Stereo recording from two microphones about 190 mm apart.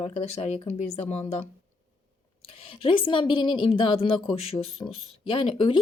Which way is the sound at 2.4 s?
30° left (ahead or behind).